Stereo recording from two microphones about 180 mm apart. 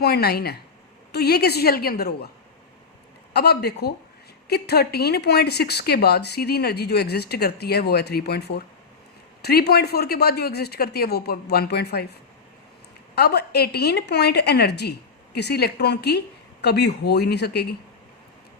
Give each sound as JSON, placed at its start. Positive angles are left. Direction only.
{"t": 0.0, "sound": "a woman's voice", "side_deg": 60}
{"t": 3.3, "sound": "a woman's voice", "side_deg": 60}
{"t": 13.1, "sound": "a woman's voice", "side_deg": 65}